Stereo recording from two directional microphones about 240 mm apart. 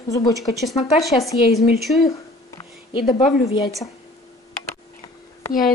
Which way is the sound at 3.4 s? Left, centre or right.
Left.